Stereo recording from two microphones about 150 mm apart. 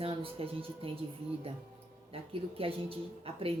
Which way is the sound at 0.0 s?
40° right (ahead or behind).